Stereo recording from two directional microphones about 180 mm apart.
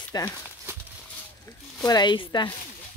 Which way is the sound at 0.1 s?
20° left (ahead or behind).